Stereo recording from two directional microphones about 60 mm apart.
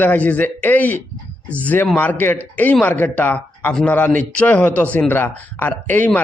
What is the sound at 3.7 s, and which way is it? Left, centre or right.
Speech, centre.